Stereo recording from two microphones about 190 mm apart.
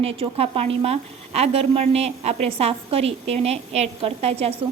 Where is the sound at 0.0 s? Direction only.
30° right (ahead or behind).